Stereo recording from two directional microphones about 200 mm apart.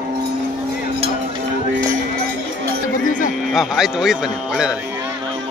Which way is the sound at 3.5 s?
Centre (ahead or behind).